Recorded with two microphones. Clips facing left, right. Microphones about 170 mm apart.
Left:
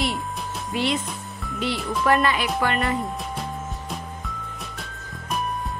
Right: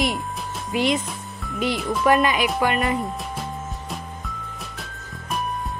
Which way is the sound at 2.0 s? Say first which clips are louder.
Right 2 dB; 15° right (ahead or behind).